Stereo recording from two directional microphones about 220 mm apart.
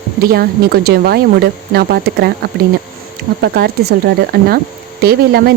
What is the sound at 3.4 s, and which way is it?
Speech, 45° right (ahead or behind).